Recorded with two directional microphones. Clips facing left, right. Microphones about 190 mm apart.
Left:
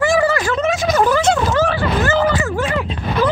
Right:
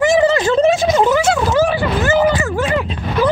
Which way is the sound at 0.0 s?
20° right (ahead or behind).